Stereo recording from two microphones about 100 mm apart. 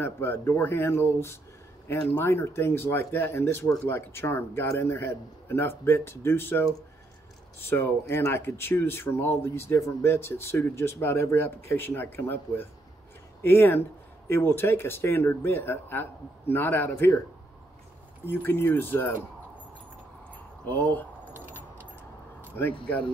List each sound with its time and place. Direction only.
0.0 s speech: 25° left (ahead or behind)
18.2 s speech: 20° left (ahead or behind)
20.6 s speech: 20° left (ahead or behind)